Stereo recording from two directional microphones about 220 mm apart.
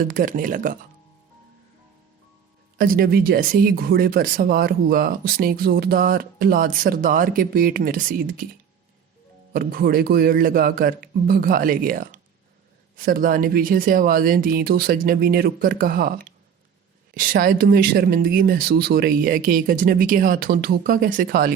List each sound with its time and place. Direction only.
0.0 s speech: 40° right (ahead or behind)
2.7 s speech: 40° right (ahead or behind)
9.5 s speech: 45° right (ahead or behind)